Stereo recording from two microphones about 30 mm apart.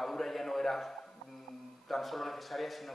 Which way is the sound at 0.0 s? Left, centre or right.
Centre.